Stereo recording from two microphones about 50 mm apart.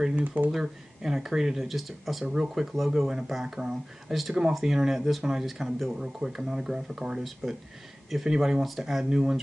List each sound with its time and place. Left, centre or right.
0.1 s speech: right
0.5 s speech: centre
7.4 s speech: centre
9.1 s speech: centre